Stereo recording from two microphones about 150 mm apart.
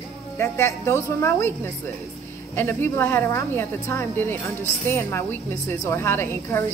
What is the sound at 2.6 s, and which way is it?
A woman's voice, 15° left (ahead or behind).